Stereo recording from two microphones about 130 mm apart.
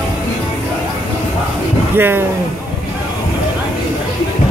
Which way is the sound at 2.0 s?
15° right (ahead or behind).